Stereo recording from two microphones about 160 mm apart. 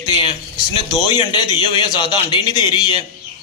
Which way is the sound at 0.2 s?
30° left (ahead or behind).